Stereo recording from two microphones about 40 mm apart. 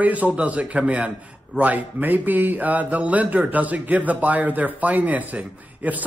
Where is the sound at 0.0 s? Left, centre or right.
Right.